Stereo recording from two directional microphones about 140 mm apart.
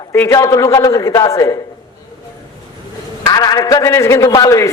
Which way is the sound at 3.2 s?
30° left (ahead or behind).